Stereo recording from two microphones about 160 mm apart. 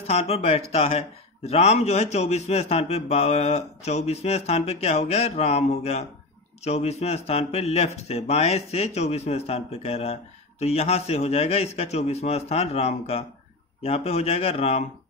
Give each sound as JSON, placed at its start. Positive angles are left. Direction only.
{"t": 0.0, "sound": "speech", "side_deg": 40}